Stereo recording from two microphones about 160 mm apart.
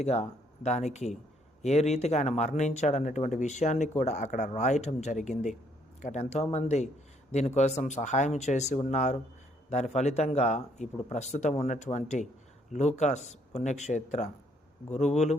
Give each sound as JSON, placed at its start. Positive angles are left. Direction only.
{"t": 0.0, "sound": "a man's voice", "side_deg": 45}